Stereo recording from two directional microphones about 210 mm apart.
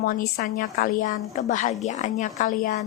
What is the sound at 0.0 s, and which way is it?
A woman's voice, 45° left (ahead or behind).